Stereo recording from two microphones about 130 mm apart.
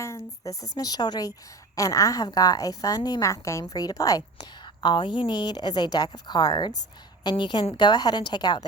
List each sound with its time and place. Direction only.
0.0 s a woman's voice: 20° left (ahead or behind)